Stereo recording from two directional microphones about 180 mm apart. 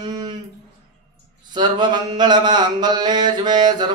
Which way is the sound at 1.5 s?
25° right (ahead or behind).